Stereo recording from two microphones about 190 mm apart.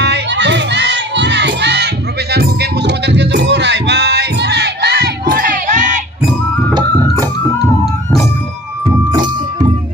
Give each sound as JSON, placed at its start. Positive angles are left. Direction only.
{"t": 0.0, "sound": "crowd", "side_deg": -65}
{"t": 2.3, "sound": "music", "side_deg": -60}
{"t": 5.3, "sound": "crowd", "side_deg": -45}
{"t": 8.9, "sound": "music", "side_deg": -20}